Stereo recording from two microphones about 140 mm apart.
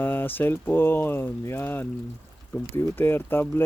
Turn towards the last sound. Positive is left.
turn(degrees=15)  # may be behind; listen again after turning